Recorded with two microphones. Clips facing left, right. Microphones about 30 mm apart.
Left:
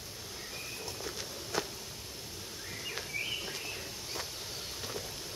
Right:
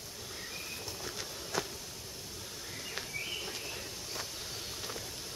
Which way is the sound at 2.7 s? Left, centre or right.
Centre.